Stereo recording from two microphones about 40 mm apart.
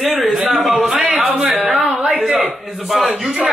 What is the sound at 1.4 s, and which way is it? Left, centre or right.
Speech, right.